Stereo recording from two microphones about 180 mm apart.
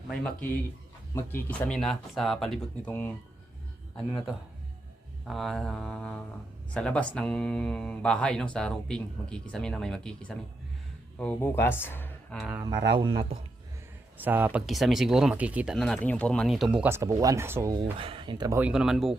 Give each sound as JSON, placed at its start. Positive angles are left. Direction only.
{"t": 1.1, "sound": "speech", "side_deg": 10}
{"t": 12.4, "sound": "speech", "side_deg": -5}
{"t": 13.0, "sound": "speech", "side_deg": -30}
{"t": 14.2, "sound": "speech", "side_deg": -10}
{"t": 17.9, "sound": "speech", "side_deg": -30}
{"t": 18.6, "sound": "speech", "side_deg": -5}